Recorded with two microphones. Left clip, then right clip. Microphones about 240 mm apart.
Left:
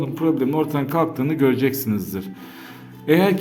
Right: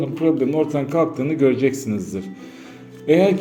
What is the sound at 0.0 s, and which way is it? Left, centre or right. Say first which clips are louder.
A man's voice: right 2 dB; centre.